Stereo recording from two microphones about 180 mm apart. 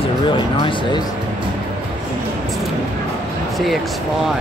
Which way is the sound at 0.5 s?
25° left (ahead or behind).